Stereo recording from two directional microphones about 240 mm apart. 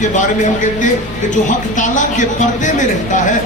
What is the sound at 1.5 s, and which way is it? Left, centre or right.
Speech, left.